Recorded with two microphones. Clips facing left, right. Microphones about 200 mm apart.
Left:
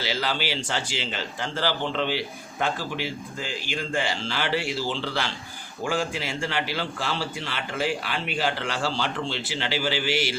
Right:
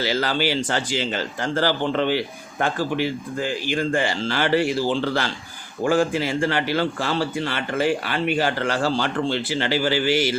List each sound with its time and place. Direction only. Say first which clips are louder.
0.0 s speech: right 6 dB; 45° right (ahead or behind)